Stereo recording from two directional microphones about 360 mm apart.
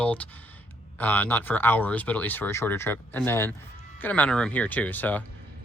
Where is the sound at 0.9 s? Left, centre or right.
Centre.